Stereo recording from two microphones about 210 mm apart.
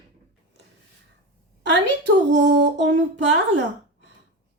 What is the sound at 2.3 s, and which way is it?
Speech, 55° right (ahead or behind).